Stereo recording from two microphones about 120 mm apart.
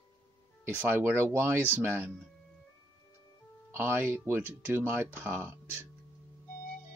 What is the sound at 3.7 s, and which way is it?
Speech, 20° right (ahead or behind).